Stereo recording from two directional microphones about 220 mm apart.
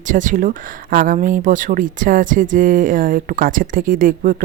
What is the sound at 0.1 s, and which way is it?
Speech, 35° right (ahead or behind).